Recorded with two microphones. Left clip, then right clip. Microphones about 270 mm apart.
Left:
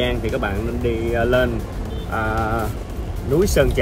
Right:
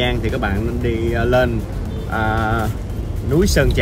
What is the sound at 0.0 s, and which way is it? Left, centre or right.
Speech, centre.